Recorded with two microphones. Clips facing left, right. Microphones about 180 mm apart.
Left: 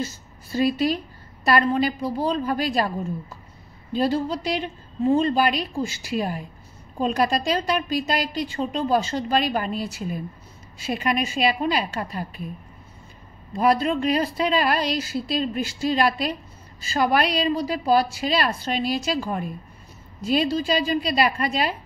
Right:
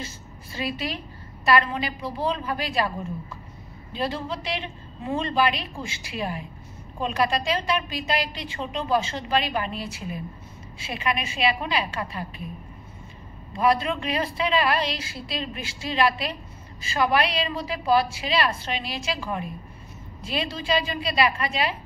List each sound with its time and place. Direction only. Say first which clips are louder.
0.5 s a woman's voice: left 9 dB; 40° left (ahead or behind)
3.9 s a woman's voice: left 6 dB; 40° left (ahead or behind)
13.6 s a woman's voice: left 3 dB; 40° left (ahead or behind)